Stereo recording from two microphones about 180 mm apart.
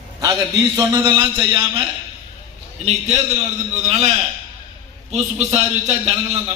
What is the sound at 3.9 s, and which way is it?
A man's voice, 35° right (ahead or behind).